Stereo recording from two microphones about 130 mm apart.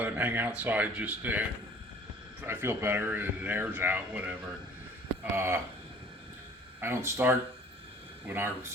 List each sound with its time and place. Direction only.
0.0 s speech: 10° right (ahead or behind)
6.7 s speech: 15° right (ahead or behind)